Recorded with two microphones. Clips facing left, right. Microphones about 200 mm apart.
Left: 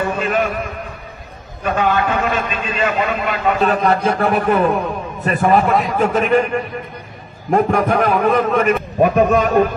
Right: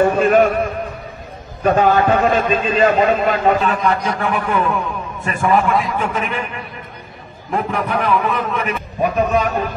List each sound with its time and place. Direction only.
0.0 s a man's voice: 45° right (ahead or behind)
1.6 s a man's voice: 40° right (ahead or behind)
3.5 s a man's voice: 40° left (ahead or behind)